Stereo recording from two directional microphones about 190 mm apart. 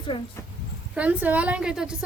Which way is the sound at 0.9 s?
5° right (ahead or behind).